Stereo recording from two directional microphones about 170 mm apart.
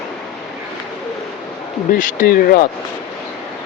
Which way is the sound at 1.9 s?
50° left (ahead or behind).